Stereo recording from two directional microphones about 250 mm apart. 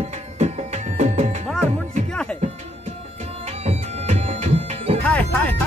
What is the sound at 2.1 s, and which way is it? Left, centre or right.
Music, centre.